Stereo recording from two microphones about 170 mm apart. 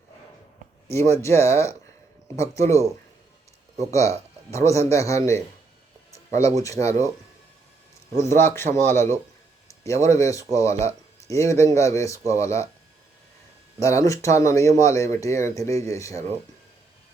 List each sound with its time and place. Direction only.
1.1 s a man's voice: 15° left (ahead or behind)
6.1 s a sound: 20° left (ahead or behind)
6.6 s speech: 20° left (ahead or behind)
8.1 s a man's voice: 15° left (ahead or behind)
13.8 s a man's voice: 20° left (ahead or behind)